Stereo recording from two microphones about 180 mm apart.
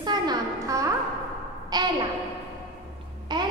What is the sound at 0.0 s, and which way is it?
Music, 20° right (ahead or behind).